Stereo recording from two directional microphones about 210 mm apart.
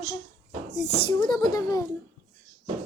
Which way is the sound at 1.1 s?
20° left (ahead or behind).